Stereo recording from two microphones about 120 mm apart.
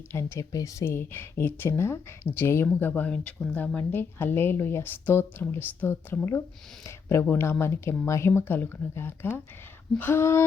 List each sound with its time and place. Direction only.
0.1 s a woman's voice: 20° left (ahead or behind)